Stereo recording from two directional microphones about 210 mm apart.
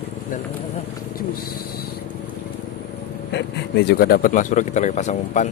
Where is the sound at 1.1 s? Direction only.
45° left (ahead or behind).